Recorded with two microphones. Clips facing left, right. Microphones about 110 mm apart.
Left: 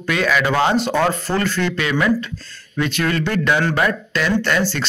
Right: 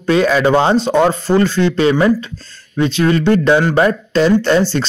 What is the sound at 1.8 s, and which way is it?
Speech, 30° right (ahead or behind).